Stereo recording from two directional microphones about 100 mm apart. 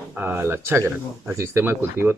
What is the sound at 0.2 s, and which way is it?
Speech, 20° right (ahead or behind).